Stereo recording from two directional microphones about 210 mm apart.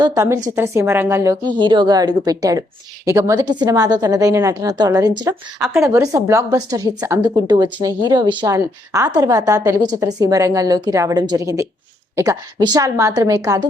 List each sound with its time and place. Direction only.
0.0 s speech: 15° right (ahead or behind)